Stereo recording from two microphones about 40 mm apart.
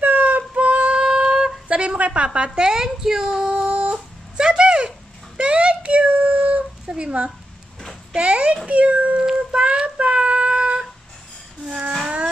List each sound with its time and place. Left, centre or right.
0.0 s a sound: right
6.9 s a child's voice: right
9.5 s child singing: right